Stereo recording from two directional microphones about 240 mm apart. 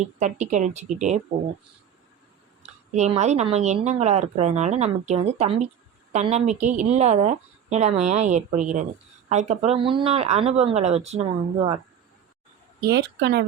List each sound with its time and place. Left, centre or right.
0.0 s speech: right
2.9 s speech: right
12.8 s a woman's voice: right